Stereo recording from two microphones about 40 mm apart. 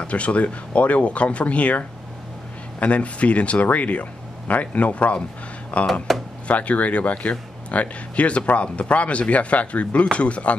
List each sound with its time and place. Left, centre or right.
0.0 s speech: left
6.1 s drawer open or close: centre
6.4 s speech: left